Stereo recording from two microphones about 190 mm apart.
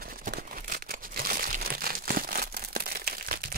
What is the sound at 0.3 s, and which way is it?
Crumpling, 50° right (ahead or behind).